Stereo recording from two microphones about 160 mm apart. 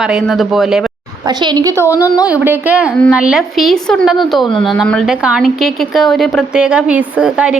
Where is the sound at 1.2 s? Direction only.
25° right (ahead or behind).